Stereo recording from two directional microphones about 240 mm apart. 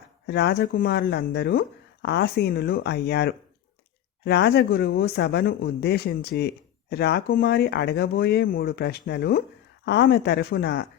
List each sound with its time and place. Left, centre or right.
0.3 s speech: left